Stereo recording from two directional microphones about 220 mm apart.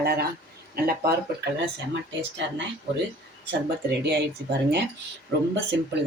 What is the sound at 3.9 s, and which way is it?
Speech, 50° right (ahead or behind).